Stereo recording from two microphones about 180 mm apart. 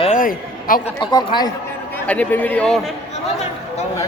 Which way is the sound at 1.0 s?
25° left (ahead or behind).